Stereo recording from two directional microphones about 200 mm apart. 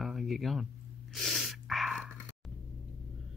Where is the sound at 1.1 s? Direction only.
Centre (ahead or behind).